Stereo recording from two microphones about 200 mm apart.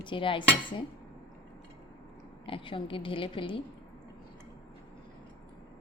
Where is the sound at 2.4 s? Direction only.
25° left (ahead or behind).